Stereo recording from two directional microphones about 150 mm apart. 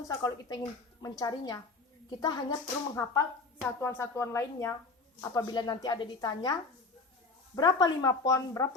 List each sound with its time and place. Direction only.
0.1 s a woman's voice: 25° left (ahead or behind)
7.5 s a woman's voice: 25° left (ahead or behind)